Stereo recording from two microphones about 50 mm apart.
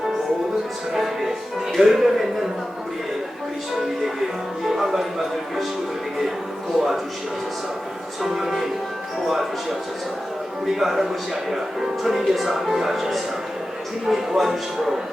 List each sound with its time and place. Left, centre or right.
0.9 s speech: centre
4.7 s speech: centre
6.7 s speech: centre
8.2 s speech: centre
10.8 s speech: centre